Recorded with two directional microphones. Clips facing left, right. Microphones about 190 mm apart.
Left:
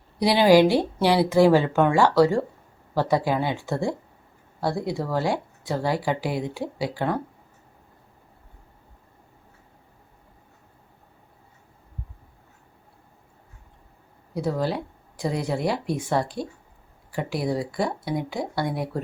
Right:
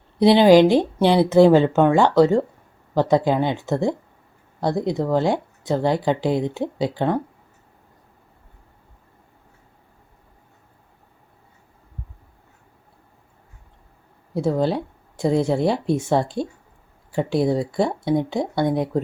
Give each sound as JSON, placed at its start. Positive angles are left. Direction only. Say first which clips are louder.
{"t": 0.2, "sound": "speech", "louder": "right 4 dB", "side_deg": -20}
{"t": 14.3, "sound": "speech", "louder": "right 5 dB", "side_deg": -25}